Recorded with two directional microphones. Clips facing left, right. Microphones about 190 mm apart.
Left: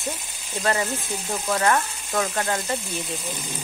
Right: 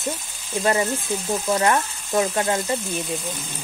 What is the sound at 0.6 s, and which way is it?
A woman's voice, 20° right (ahead or behind).